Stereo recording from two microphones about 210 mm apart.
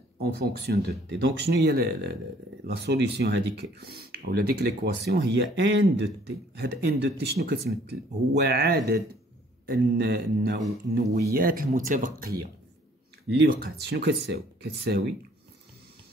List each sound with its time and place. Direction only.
0.2 s speech: 50° right (ahead or behind)